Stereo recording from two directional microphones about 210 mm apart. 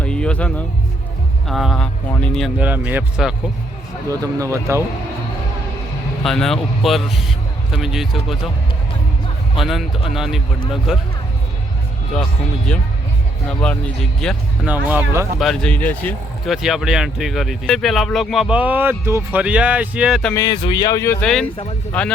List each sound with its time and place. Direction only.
0.0 s music: 5° left (ahead or behind)
1.5 s speech: centre (ahead or behind)
4.1 s speech: 15° right (ahead or behind)
6.2 s speech: centre (ahead or behind)
9.6 s speech: centre (ahead or behind)
13.6 s speech: 5° left (ahead or behind); by 15.3 s 10° right (ahead or behind)
15.4 s speech: 5° left (ahead or behind)
20.3 s speech: 20° left (ahead or behind)